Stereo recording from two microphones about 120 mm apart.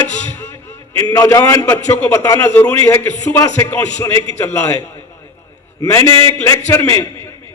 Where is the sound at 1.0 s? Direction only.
35° left (ahead or behind).